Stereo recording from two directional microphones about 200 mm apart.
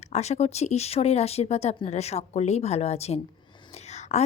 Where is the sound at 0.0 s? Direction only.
35° left (ahead or behind).